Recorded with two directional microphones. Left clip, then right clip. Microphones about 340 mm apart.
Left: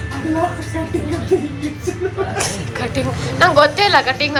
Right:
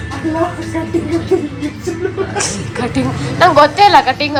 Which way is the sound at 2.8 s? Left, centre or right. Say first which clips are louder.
Right 4 dB; centre.